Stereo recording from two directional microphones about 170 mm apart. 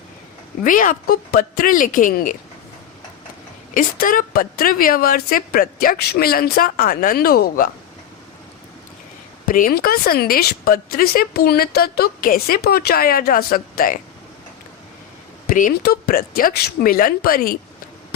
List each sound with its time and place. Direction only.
0.6 s speech: 50° left (ahead or behind)
3.8 s speech: 55° left (ahead or behind)
9.5 s speech: 60° left (ahead or behind)
15.4 s speech: 55° left (ahead or behind)